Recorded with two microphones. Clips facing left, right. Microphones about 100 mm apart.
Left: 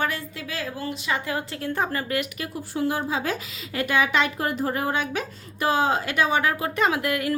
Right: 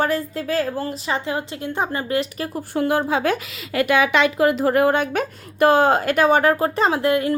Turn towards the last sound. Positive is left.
turn(degrees=-30)  # may be behind; listen again after turning